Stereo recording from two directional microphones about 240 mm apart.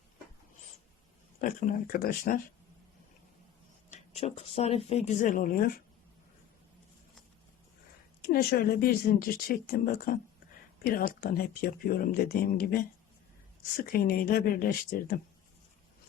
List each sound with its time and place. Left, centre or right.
1.4 s speech: left
3.9 s speech: left
8.2 s speech: left
13.8 s speech: left